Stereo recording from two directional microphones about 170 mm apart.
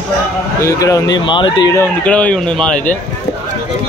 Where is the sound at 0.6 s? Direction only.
15° left (ahead or behind).